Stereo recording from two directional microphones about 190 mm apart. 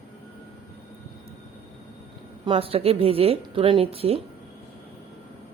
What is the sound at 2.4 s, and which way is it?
Speech, 30° right (ahead or behind).